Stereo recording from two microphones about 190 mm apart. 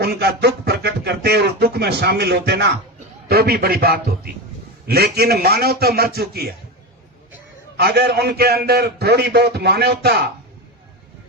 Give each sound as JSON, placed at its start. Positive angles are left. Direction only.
{"t": 0.0, "sound": "speech", "side_deg": -60}
{"t": 7.8, "sound": "speech", "side_deg": -60}